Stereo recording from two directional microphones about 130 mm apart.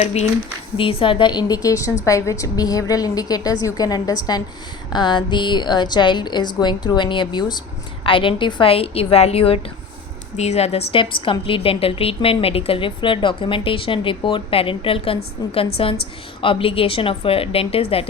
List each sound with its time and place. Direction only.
0.0 s speech: 55° left (ahead or behind)
0.8 s a woman's voice: 45° left (ahead or behind)